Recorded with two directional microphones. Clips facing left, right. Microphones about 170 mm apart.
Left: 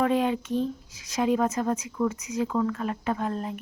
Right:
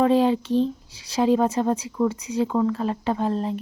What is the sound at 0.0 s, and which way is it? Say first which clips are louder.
Speech: right 5 dB; 30° right (ahead or behind).